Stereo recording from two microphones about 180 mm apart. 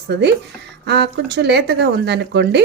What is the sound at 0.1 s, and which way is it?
Speech, 70° right (ahead or behind).